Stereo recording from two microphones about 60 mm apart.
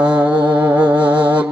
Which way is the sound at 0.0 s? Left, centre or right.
Right.